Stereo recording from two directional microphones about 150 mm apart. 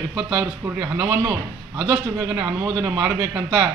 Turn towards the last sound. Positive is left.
turn(degrees=-10)  # may be behind; listen again after turning